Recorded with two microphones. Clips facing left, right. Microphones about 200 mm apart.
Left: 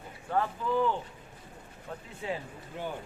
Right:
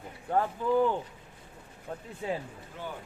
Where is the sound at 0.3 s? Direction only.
40° right (ahead or behind).